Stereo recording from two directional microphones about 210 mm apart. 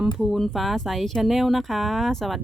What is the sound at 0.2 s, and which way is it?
Speech, centre (ahead or behind).